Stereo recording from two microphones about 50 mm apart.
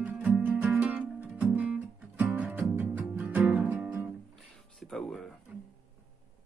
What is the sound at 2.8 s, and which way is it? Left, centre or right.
Music, right.